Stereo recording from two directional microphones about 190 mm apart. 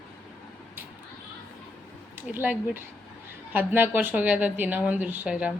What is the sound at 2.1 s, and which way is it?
A woman's voice, 10° right (ahead or behind).